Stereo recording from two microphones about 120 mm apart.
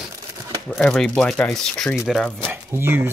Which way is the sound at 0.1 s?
25° right (ahead or behind).